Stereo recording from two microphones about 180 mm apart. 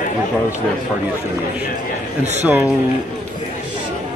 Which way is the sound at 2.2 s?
40° right (ahead or behind).